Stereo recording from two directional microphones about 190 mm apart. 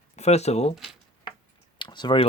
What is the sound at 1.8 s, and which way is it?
Speech, 25° left (ahead or behind).